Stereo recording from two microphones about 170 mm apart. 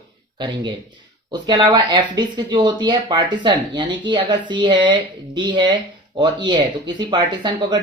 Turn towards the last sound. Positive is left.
turn(degrees=-25)  # may be behind; listen again after turning